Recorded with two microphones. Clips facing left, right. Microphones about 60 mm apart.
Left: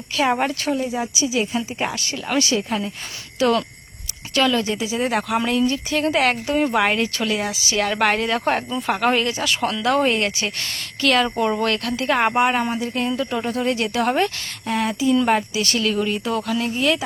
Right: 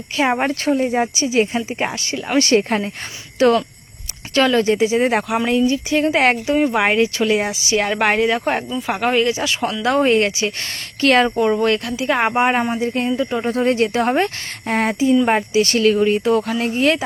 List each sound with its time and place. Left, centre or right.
0.2 s a woman's voice: right
0.9 s speech: right
1.5 s a woman's voice: right
2.4 s speech: right
3.4 s speech: right
5.5 s a woman's voice: centre
6.5 s a woman's voice: centre
7.9 s a woman's voice: centre; by 11.3 s right
11.3 s speech: centre
11.6 s a woman's voice: centre
13.1 s a woman's voice: centre
13.5 s speech: right